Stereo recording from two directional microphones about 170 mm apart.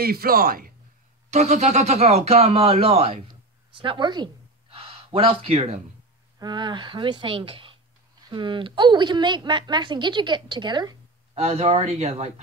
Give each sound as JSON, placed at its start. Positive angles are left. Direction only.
{"t": 0.0, "sound": "speech", "side_deg": -60}
{"t": 1.3, "sound": "a woman's voice", "side_deg": -40}
{"t": 11.3, "sound": "speech", "side_deg": -40}